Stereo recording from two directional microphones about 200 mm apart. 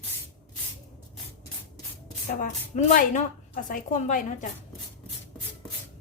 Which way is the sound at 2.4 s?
40° left (ahead or behind).